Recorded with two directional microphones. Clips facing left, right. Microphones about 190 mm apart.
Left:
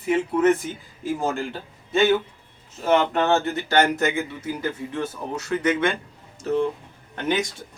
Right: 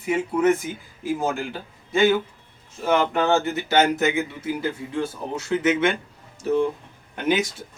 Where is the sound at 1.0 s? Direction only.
15° right (ahead or behind).